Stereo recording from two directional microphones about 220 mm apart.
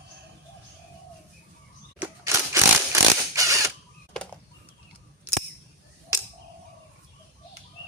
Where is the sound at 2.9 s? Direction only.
15° right (ahead or behind).